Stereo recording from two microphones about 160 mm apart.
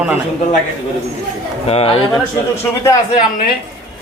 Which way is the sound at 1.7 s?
35° left (ahead or behind).